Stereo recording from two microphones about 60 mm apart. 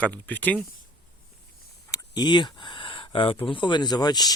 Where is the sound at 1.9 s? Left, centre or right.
Left.